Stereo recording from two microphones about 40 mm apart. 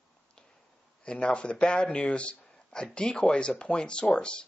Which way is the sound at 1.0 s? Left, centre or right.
Left.